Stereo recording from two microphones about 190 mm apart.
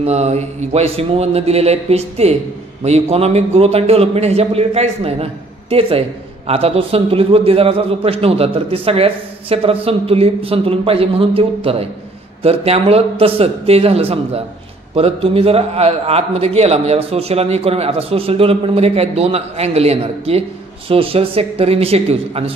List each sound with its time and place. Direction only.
0.0 s a man's voice: 35° right (ahead or behind)